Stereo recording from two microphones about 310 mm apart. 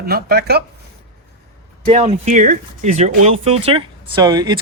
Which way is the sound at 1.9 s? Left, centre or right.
Right.